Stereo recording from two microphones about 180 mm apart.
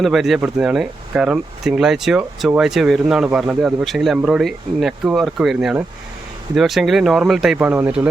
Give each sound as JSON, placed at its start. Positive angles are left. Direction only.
{"t": 0.0, "sound": "speech", "side_deg": 0}